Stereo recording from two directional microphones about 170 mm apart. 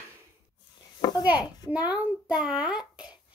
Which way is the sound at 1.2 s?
10° right (ahead or behind).